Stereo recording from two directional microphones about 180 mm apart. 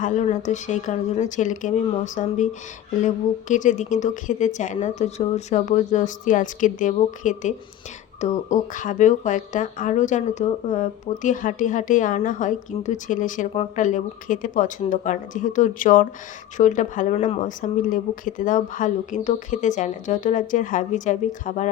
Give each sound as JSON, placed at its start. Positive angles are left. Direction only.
{"t": 0.0, "sound": "speech", "side_deg": 40}